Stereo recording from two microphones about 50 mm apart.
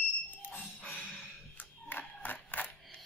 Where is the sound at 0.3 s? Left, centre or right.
Left.